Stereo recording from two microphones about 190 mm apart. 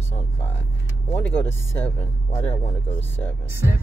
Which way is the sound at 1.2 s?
10° left (ahead or behind).